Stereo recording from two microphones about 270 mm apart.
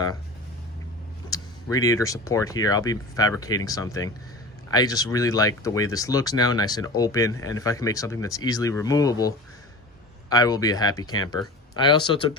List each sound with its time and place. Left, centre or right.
1.3 s speech: centre